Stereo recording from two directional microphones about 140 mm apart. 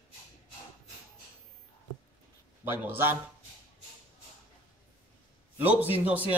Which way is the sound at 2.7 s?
15° right (ahead or behind).